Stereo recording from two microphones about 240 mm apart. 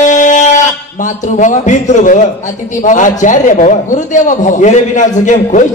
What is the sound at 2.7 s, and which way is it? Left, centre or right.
A man's voice, left.